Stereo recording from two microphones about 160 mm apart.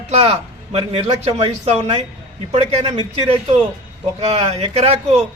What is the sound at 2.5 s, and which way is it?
Speech, 40° right (ahead or behind).